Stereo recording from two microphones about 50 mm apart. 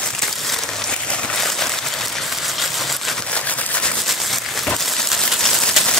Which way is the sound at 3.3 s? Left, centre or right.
Left.